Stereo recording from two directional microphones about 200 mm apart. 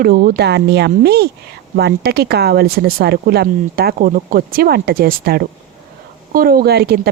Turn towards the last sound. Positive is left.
turn(degrees=-50)  # may be behind; listen again after turning